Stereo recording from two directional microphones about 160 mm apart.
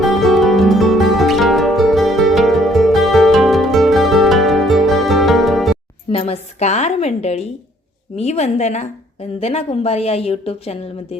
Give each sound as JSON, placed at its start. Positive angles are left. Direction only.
{"t": 0.0, "sound": "music", "side_deg": 0}
{"t": 6.1, "sound": "a woman's voice", "side_deg": 40}